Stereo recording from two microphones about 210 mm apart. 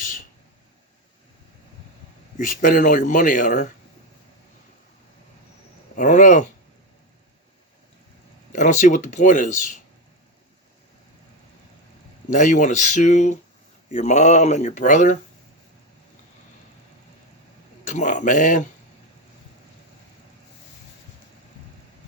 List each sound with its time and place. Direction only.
2.4 s speech: 40° left (ahead or behind)
6.0 s speech: 35° left (ahead or behind)
8.5 s speech: 35° left (ahead or behind)
12.3 s speech: 40° left (ahead or behind)
17.8 s speech: 35° left (ahead or behind)